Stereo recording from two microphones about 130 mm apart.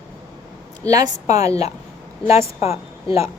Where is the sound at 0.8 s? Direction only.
25° right (ahead or behind).